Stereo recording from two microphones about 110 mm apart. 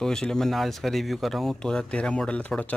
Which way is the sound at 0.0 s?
5° left (ahead or behind).